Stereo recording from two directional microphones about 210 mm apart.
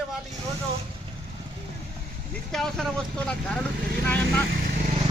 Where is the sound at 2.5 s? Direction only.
Centre (ahead or behind).